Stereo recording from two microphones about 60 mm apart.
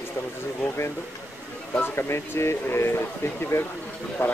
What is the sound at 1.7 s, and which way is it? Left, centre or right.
Speech, left.